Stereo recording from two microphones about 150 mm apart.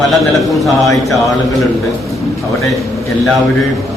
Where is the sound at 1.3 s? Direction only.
25° left (ahead or behind).